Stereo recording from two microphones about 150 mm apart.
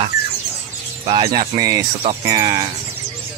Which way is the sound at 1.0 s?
35° right (ahead or behind).